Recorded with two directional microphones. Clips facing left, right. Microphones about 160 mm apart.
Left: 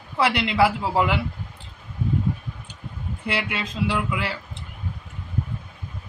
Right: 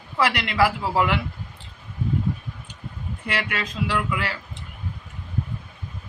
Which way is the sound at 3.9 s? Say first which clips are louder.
Even; 25° left (ahead or behind).